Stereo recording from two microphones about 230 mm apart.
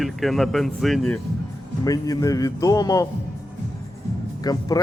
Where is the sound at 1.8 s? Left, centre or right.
Centre.